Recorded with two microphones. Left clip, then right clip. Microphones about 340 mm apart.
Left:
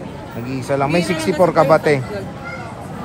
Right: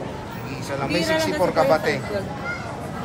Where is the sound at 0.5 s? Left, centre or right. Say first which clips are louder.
Left 7 dB; centre.